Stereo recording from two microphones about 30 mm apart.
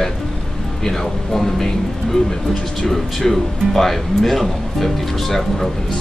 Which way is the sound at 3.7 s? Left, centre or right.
Centre.